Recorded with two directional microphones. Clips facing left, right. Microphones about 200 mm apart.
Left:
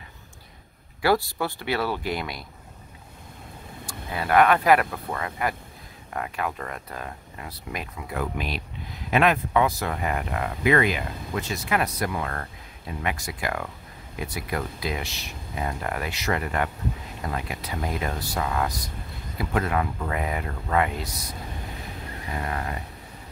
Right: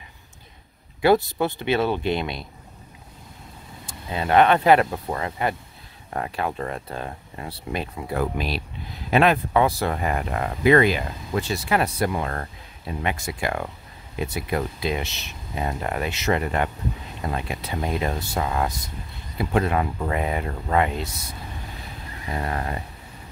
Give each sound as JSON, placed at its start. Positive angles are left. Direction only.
{"t": 1.0, "sound": "speech", "side_deg": -20}
{"t": 3.8, "sound": "speech", "side_deg": -25}
{"t": 22.4, "sound": "speech", "side_deg": -35}